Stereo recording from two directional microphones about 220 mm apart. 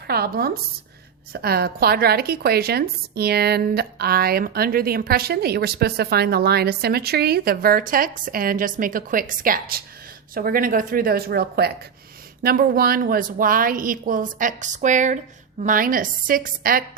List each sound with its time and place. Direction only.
0.1 s a woman's voice: 45° right (ahead or behind)